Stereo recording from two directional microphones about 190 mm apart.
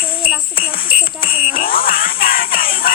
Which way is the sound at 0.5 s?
50° left (ahead or behind).